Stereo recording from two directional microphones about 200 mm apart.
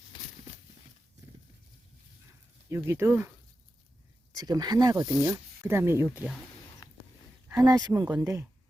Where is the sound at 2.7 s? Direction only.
15° right (ahead or behind).